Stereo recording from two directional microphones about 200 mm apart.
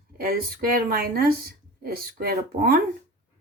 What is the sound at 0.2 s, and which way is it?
Speech, 45° right (ahead or behind).